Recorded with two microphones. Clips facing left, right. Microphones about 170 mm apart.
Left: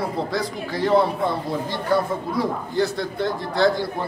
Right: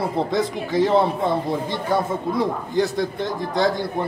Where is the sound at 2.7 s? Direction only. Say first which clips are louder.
Right 1 dB; 20° right (ahead or behind).